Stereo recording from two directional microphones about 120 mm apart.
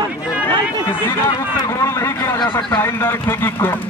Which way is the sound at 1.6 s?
25° left (ahead or behind).